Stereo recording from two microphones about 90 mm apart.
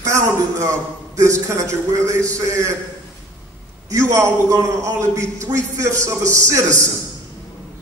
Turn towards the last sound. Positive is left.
turn(degrees=-35)  # may be behind; listen again after turning